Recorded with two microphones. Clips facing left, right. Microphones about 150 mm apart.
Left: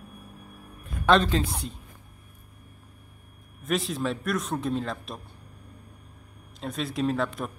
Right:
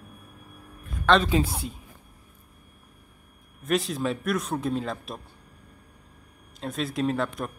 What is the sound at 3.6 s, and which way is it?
Speech, centre (ahead or behind).